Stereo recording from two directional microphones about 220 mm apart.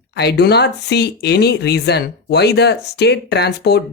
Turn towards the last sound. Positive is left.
turn(degrees=50)  # may be behind; listen again after turning